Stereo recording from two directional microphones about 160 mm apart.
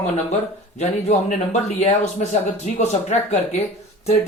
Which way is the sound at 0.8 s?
45° left (ahead or behind).